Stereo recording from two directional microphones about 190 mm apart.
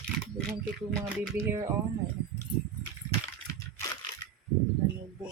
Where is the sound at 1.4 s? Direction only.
15° right (ahead or behind).